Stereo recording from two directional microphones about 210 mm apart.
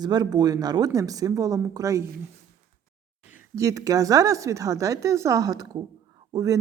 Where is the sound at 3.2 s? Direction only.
10° right (ahead or behind).